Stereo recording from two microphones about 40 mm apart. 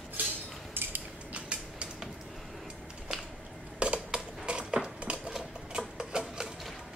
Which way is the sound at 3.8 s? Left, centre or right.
Right.